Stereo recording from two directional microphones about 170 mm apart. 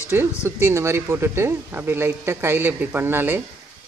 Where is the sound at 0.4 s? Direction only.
15° right (ahead or behind).